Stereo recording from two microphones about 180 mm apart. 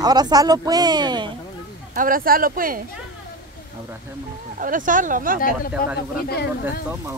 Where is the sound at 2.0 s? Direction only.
50° right (ahead or behind).